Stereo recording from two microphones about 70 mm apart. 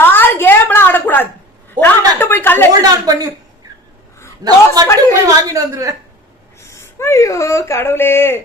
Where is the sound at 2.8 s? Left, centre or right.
Right.